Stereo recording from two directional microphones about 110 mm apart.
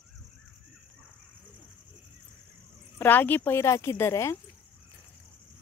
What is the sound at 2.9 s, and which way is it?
A woman's voice, 15° left (ahead or behind).